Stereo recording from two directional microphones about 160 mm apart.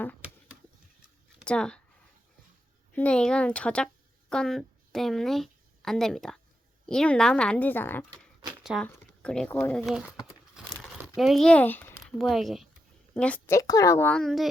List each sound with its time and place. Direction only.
1.5 s speech: 5° left (ahead or behind)
2.9 s a woman's voice: 10° left (ahead or behind)
8.6 s speech: centre (ahead or behind)
10.2 s crumpling: centre (ahead or behind)
11.2 s speech: centre (ahead or behind)
12.1 s a woman's voice: centre (ahead or behind)
13.6 s a woman's voice: 20° left (ahead or behind); by 14.5 s centre (ahead or behind)